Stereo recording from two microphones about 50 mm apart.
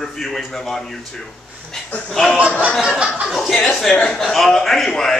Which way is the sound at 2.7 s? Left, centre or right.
Centre.